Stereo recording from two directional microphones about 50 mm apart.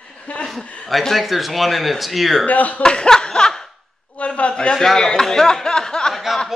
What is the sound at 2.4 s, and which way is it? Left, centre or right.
Speech, left.